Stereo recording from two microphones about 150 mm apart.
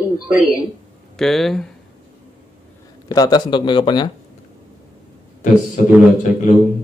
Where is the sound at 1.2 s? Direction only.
Centre (ahead or behind).